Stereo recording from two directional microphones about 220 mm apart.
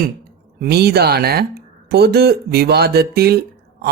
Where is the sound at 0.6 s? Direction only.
45° right (ahead or behind).